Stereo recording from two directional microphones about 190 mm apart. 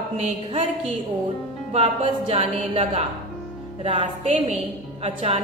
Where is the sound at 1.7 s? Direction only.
35° right (ahead or behind).